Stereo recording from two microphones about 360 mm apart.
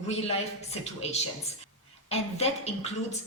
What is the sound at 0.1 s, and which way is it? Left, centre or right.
Speech, centre.